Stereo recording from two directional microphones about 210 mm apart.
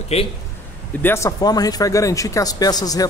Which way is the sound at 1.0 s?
10° left (ahead or behind).